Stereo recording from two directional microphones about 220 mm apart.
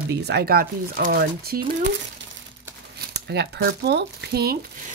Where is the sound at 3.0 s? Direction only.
50° right (ahead or behind).